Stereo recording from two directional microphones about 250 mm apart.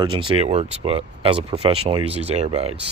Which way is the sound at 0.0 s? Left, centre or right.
Centre.